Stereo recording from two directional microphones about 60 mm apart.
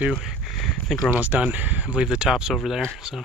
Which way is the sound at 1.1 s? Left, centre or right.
Right.